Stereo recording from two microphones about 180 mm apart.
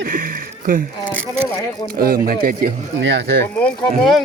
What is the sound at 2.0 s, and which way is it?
Speech, 55° right (ahead or behind).